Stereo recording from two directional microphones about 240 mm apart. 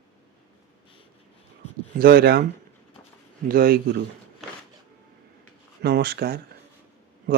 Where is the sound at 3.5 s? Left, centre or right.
Right.